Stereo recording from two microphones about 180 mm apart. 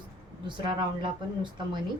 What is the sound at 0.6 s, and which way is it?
Speech, 25° right (ahead or behind).